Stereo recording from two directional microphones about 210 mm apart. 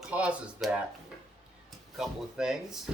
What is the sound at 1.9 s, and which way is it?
Speech, centre (ahead or behind).